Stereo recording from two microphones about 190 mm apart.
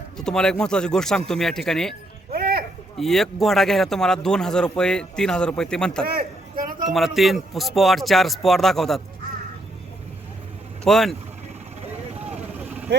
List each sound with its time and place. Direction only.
0.2 s speech: 5° left (ahead or behind)
2.3 s a sound: 55° right (ahead or behind)
3.0 s speech: centre (ahead or behind)
6.1 s a sound: 50° right (ahead or behind)
6.8 s speech: centre (ahead or behind)
10.8 s speech: centre (ahead or behind)